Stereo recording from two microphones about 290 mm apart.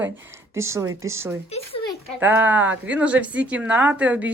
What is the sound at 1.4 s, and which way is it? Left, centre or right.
Speech, centre.